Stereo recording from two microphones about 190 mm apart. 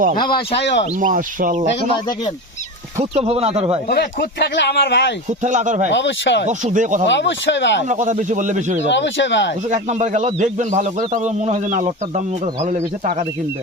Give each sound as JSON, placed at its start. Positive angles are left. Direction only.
{"t": 0.6, "sound": "speech", "side_deg": 70}
{"t": 0.9, "sound": "speech", "side_deg": -45}
{"t": 3.0, "sound": "speech", "side_deg": -35}
{"t": 3.8, "sound": "speech", "side_deg": 60}
{"t": 5.4, "sound": "speech", "side_deg": -40}
{"t": 5.9, "sound": "speech", "side_deg": 70}
{"t": 6.5, "sound": "speech", "side_deg": -40}
{"t": 7.1, "sound": "speech", "side_deg": 70}
{"t": 7.9, "sound": "speech", "side_deg": -40}
{"t": 8.9, "sound": "speech", "side_deg": 70}
{"t": 9.6, "sound": "speech", "side_deg": -40}